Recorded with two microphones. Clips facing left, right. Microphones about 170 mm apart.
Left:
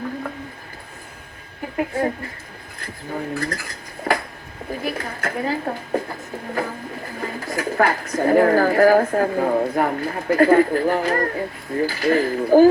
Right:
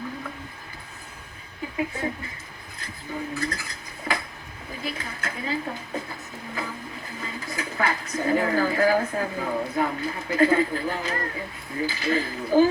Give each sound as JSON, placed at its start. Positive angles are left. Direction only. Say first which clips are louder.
{"t": 1.7, "sound": "speech", "louder": "left 7 dB", "side_deg": 50}